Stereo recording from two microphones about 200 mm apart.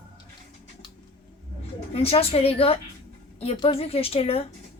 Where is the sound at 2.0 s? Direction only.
30° left (ahead or behind).